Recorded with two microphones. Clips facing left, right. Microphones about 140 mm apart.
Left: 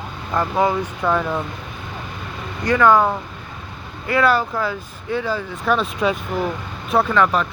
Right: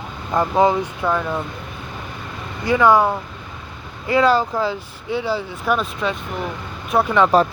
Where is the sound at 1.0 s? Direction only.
Centre (ahead or behind).